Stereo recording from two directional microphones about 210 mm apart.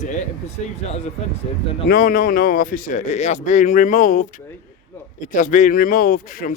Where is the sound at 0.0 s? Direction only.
35° left (ahead or behind).